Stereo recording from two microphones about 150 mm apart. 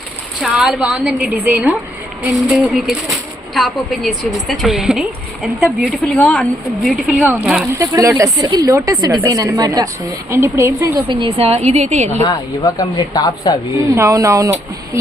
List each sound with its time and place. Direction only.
0.4 s a woman's voice: 5° right (ahead or behind)
7.7 s a woman's voice: 20° right (ahead or behind)
11.1 s a woman's voice: 35° right (ahead or behind)
12.2 s speech: 25° left (ahead or behind)
13.9 s a woman's voice: 20° right (ahead or behind)